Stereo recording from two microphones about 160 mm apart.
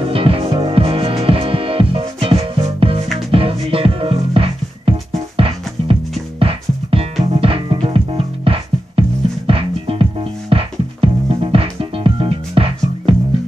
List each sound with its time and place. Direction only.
0.0 s music: 35° right (ahead or behind)
6.4 s music: 35° right (ahead or behind)